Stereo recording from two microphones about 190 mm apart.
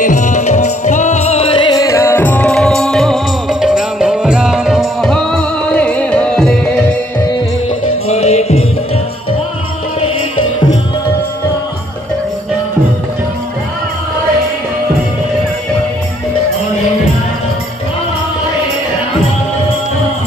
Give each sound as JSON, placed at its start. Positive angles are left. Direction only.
{"t": 0.0, "sound": "music", "side_deg": 40}
{"t": 8.1, "sound": "music", "side_deg": 35}